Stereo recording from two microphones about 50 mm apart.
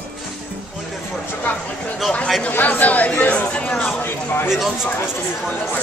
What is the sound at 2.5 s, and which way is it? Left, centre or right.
Chatter, left.